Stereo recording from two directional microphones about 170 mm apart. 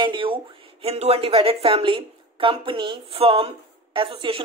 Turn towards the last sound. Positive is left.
turn(degrees=-30)  # may be behind; listen again after turning